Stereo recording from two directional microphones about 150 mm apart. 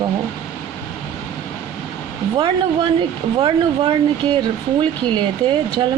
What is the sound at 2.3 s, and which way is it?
Speech, 30° right (ahead or behind).